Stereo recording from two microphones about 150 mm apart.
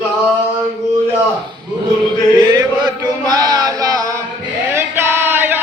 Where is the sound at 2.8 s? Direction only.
25° right (ahead or behind).